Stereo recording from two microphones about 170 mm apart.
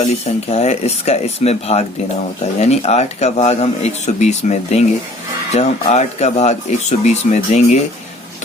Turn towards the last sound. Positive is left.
turn(degrees=40)  # may be behind; listen again after turning